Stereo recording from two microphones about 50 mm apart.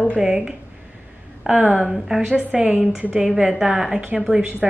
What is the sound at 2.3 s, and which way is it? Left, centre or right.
A woman's voice, right.